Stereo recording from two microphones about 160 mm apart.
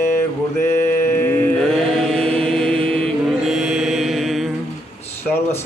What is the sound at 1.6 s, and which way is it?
Chant, centre (ahead or behind).